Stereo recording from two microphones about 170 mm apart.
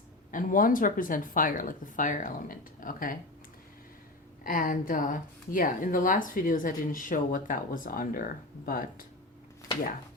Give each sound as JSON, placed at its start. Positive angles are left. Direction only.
{"t": 0.3, "sound": "speech", "side_deg": 55}
{"t": 4.4, "sound": "speech", "side_deg": 55}